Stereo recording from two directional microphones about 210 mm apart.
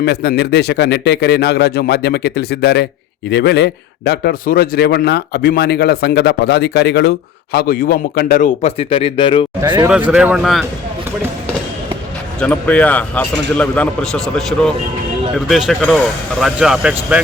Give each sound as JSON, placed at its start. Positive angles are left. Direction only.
{"t": 0.0, "sound": "a man's voice", "side_deg": 50}
{"t": 9.6, "sound": "speech", "side_deg": -15}
{"t": 10.1, "sound": "speech", "side_deg": -5}
{"t": 12.4, "sound": "speech", "side_deg": 5}